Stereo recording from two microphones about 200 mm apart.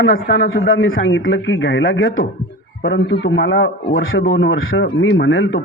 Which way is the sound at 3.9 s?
80° left.